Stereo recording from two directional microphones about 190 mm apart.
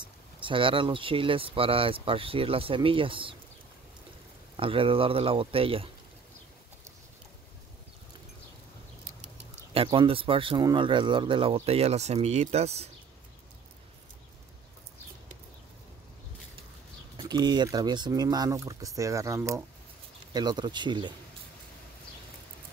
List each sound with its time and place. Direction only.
0.0 s speech: 25° right (ahead or behind)
4.6 s speech: 30° right (ahead or behind)
9.8 s speech: 25° right (ahead or behind)
17.2 s speech: 20° right (ahead or behind)